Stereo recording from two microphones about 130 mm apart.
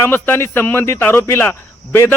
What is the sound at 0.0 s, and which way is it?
A man's voice, 15° left (ahead or behind).